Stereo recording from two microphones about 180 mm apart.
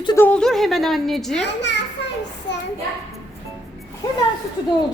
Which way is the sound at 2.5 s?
75° left (ahead or behind).